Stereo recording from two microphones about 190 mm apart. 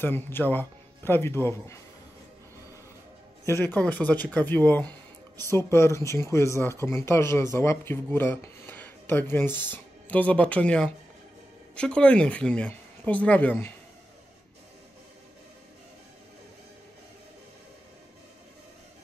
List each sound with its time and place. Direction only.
0.0 s speech: 10° left (ahead or behind)
3.4 s speech: 15° left (ahead or behind)